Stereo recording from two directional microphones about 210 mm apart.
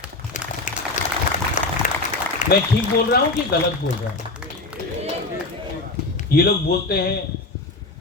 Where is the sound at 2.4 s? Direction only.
35° left (ahead or behind).